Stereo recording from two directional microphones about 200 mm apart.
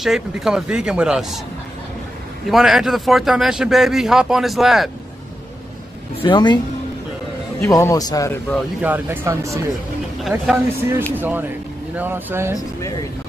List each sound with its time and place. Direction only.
0.0 s speech: centre (ahead or behind)
2.5 s speech: centre (ahead or behind)
6.2 s a woman's voice: 20° left (ahead or behind)
7.6 s a man's voice: 15° left (ahead or behind)
8.8 s speech: 10° right (ahead or behind)